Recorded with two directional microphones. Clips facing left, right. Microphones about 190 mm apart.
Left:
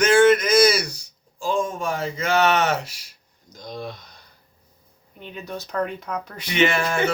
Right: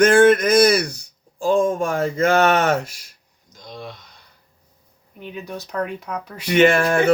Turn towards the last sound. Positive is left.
turn(degrees=-50)  # may be behind; listen again after turning